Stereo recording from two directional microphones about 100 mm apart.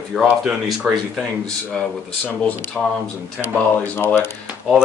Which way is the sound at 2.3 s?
20° left (ahead or behind).